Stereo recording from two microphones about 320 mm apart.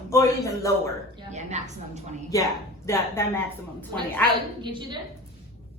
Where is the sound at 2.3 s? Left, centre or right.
Centre.